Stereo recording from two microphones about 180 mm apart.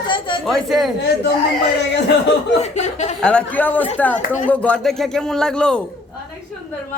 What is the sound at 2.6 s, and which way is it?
Speech, 40° left (ahead or behind).